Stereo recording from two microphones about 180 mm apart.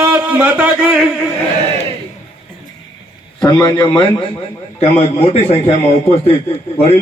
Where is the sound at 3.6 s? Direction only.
25° left (ahead or behind).